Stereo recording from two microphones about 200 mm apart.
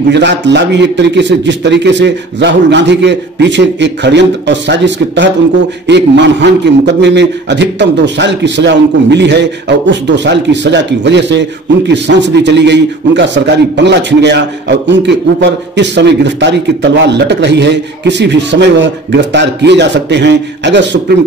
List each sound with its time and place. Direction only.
0.1 s a man's voice: 60° right (ahead or behind)